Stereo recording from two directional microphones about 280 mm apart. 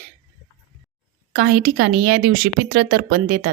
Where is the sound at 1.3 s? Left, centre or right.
Right.